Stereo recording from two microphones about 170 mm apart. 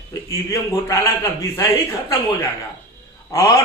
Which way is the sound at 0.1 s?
20° left (ahead or behind).